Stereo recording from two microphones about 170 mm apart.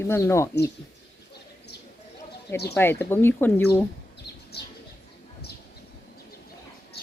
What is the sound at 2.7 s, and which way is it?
Speech, 10° left (ahead or behind).